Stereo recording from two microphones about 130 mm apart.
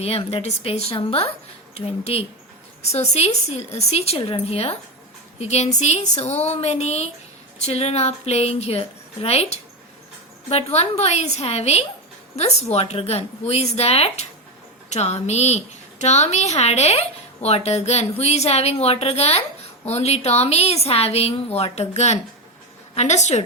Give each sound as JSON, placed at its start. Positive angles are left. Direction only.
{"t": 0.0, "sound": "a woman's voice", "side_deg": 50}